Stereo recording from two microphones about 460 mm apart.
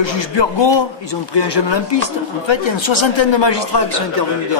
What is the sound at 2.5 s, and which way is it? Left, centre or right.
A man's voice, left.